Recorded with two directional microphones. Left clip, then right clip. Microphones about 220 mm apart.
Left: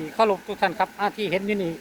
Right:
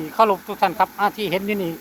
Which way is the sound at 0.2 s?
10° right (ahead or behind).